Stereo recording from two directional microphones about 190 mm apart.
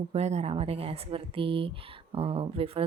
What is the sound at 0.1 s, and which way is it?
Speech, 35° right (ahead or behind).